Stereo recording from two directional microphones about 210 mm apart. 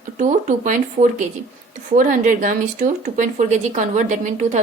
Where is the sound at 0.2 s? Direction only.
35° right (ahead or behind).